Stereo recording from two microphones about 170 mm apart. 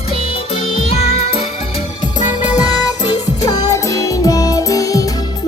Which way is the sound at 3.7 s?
20° left (ahead or behind).